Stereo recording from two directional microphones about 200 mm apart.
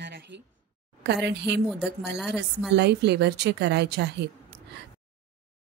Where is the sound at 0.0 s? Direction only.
60° right (ahead or behind).